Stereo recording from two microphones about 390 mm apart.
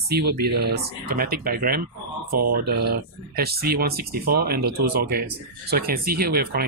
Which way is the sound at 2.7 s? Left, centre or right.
Right.